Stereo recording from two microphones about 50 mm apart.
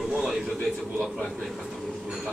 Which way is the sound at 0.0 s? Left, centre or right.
Centre.